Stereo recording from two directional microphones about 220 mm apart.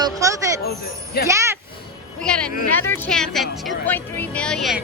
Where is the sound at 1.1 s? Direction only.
45° left (ahead or behind).